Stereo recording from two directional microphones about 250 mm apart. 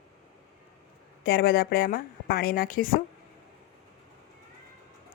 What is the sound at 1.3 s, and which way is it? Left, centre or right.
A woman's voice, left.